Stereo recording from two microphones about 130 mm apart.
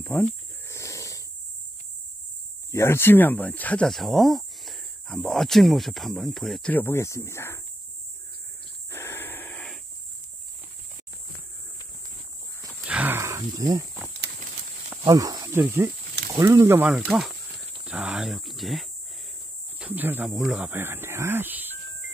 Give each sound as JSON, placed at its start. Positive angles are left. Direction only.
{"t": 0.0, "sound": "speech", "side_deg": 10}
{"t": 0.7, "sound": "snoring", "side_deg": 20}
{"t": 2.7, "sound": "speech", "side_deg": 20}
{"t": 6.7, "sound": "speech", "side_deg": 15}
{"t": 8.9, "sound": "wheeze", "side_deg": 15}
{"t": 12.8, "sound": "wild animals", "side_deg": -10}
{"t": 15.1, "sound": "speech", "side_deg": -30}
{"t": 15.6, "sound": "speech", "side_deg": -15}
{"t": 19.8, "sound": "speech", "side_deg": -15}
{"t": 20.7, "sound": "speech", "side_deg": -15}